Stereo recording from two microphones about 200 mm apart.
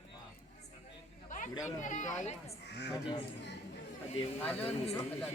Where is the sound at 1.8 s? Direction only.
40° left (ahead or behind).